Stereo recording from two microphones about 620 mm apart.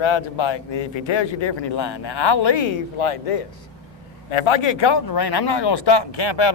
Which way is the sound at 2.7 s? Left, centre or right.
Left.